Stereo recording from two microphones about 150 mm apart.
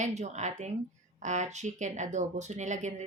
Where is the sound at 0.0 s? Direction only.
50° right (ahead or behind).